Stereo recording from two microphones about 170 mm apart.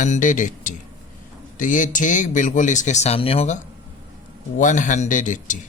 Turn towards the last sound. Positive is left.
turn(degrees=50)  # may be behind; listen again after turning